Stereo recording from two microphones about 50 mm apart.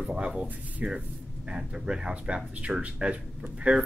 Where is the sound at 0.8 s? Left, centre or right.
Right.